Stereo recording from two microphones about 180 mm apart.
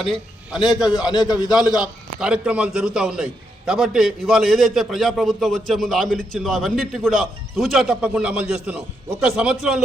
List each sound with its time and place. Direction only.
0.5 s speech: centre (ahead or behind)
1.0 s a man's voice: 25° left (ahead or behind)
1.8 s speech: 5° right (ahead or behind)